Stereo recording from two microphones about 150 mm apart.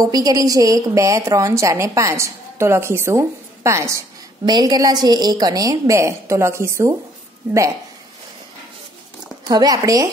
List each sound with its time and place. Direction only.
0.0 s a woman's voice: 25° right (ahead or behind)
9.5 s a woman's voice: 25° right (ahead or behind)